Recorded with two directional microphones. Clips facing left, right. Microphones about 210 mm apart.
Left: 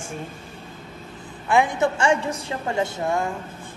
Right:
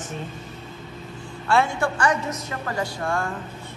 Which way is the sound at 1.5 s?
15° left (ahead or behind).